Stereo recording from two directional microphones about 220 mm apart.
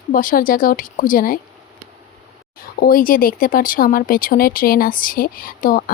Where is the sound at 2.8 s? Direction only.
40° left (ahead or behind).